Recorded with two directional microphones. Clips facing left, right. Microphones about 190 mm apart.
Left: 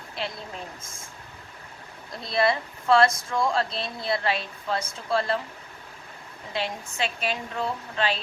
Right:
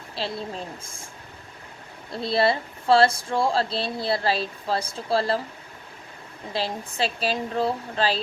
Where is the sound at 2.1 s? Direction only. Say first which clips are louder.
Right 2 dB; 30° right (ahead or behind).